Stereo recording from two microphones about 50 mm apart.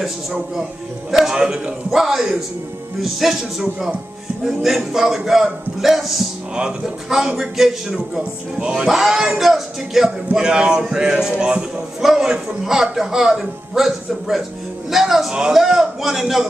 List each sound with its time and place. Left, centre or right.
0.0 s a man's voice: centre
8.5 s a man's voice: centre
10.3 s a man's voice: centre
12.0 s a man's voice: centre